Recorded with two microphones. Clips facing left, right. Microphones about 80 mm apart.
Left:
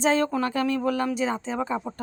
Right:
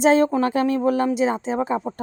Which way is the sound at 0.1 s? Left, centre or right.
Right.